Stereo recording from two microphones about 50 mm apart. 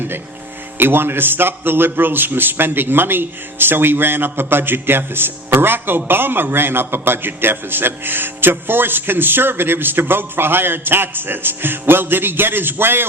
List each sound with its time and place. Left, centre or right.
0.8 s a man's voice: right